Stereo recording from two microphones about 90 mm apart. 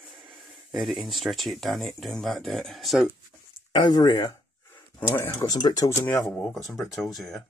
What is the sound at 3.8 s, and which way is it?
Speech, 50° left (ahead or behind).